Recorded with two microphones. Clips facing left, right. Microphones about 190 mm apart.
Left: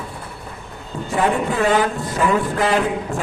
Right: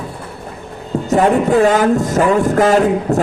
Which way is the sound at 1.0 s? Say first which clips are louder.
Right 7 dB; 40° right (ahead or behind).